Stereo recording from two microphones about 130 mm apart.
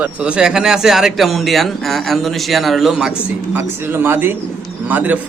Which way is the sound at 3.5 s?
15° right (ahead or behind).